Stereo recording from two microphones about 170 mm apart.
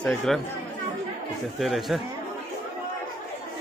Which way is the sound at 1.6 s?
Centre (ahead or behind).